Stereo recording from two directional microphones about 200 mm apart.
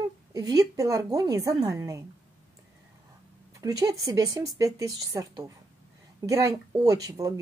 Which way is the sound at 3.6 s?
15° right (ahead or behind).